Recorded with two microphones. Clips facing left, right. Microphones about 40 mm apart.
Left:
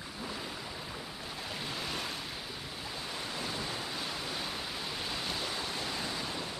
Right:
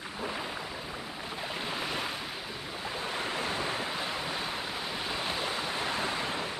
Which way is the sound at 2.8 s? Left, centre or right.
Right.